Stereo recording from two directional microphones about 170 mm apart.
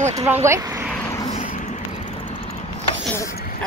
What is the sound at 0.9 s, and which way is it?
Vehicle, 15° left (ahead or behind).